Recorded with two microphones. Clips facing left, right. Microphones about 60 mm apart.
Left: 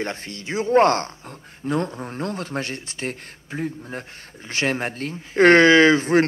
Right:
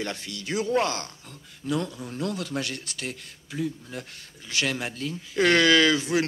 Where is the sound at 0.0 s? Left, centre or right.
Left.